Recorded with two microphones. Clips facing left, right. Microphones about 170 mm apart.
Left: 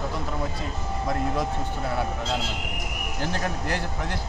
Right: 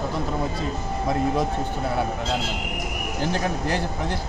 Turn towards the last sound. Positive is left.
turn(degrees=-25)  # may be behind; listen again after turning